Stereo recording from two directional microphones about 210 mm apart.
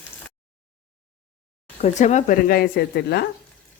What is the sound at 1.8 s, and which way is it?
Speech, 35° left (ahead or behind).